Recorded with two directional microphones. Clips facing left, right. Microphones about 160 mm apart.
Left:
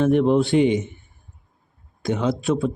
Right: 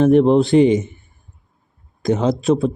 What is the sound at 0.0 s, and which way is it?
Speech, 35° right (ahead or behind).